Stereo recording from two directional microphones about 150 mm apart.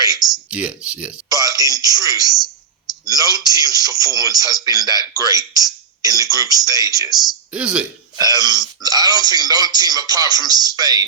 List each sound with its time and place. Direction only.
0.2 s speech: 5° right (ahead or behind)
1.3 s a sound: 25° right (ahead or behind)
3.0 s speech: 25° right (ahead or behind)
7.3 s speech: 5° right (ahead or behind)
8.1 s speech: 25° right (ahead or behind)